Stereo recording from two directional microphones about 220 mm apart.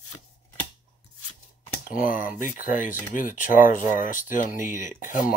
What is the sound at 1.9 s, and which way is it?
Speech, 40° left (ahead or behind).